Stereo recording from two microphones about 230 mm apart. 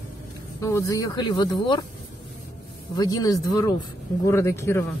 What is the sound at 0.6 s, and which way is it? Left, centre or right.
Speech, centre.